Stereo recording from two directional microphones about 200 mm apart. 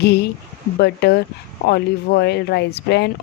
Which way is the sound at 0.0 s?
55° left (ahead or behind).